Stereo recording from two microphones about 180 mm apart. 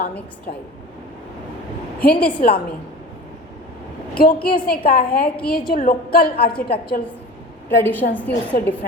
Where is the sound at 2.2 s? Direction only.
55° left (ahead or behind).